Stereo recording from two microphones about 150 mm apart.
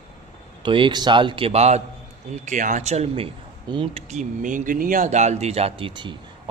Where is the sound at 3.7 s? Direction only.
35° right (ahead or behind).